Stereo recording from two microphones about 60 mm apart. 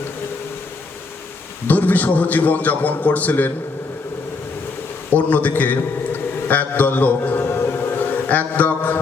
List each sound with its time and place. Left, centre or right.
1.6 s a man's voice: left
5.1 s a man's voice: left
8.1 s mantra: left